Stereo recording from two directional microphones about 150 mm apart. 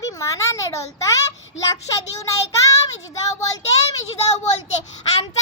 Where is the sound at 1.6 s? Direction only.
20° left (ahead or behind).